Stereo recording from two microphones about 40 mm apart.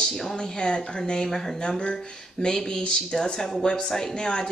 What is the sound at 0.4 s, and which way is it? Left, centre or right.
Speech, centre.